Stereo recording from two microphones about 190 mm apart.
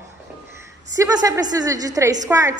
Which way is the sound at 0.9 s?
20° right (ahead or behind).